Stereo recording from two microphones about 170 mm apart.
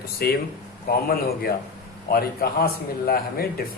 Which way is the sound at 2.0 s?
65° left (ahead or behind).